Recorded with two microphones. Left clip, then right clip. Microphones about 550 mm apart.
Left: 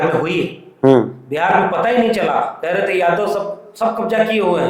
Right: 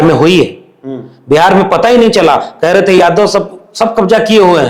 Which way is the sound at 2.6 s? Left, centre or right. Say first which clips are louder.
Right 12 dB; right.